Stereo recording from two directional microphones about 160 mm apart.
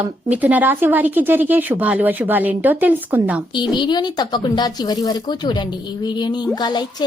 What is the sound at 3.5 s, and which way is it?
A woman's voice, 30° left (ahead or behind).